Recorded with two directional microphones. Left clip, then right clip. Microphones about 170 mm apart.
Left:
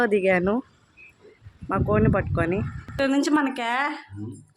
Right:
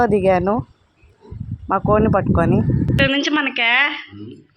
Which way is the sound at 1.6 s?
10° right (ahead or behind).